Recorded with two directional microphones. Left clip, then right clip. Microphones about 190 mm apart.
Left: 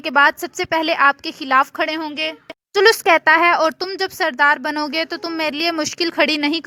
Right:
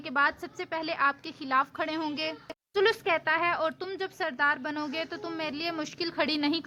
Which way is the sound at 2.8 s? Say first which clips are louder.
Left 13 dB; 45° left (ahead or behind).